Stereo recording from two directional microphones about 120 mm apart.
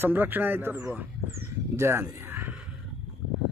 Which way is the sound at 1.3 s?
25° right (ahead or behind).